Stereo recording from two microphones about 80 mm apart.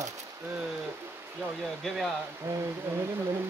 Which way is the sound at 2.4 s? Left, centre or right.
Right.